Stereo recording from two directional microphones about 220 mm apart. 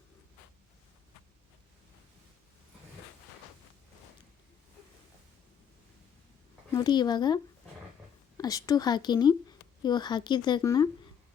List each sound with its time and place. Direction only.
6.7 s speech: 20° left (ahead or behind)
8.4 s a woman's voice: 15° left (ahead or behind)